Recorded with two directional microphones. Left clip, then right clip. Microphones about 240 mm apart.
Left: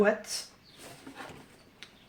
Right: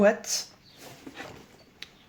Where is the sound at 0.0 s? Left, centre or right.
Right.